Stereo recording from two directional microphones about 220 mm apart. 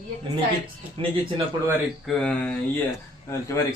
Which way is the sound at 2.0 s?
5° left (ahead or behind).